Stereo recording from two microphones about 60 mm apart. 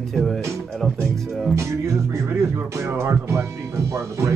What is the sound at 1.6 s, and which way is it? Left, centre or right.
Speech, right.